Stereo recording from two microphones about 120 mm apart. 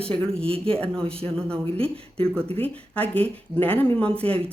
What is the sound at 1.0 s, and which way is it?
Speech, 55° right (ahead or behind).